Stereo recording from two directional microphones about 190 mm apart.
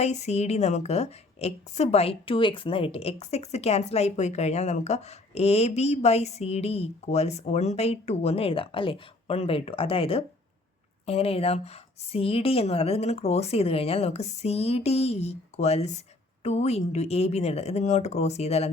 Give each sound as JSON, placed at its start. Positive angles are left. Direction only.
{"t": 0.0, "sound": "a woman's voice", "side_deg": 35}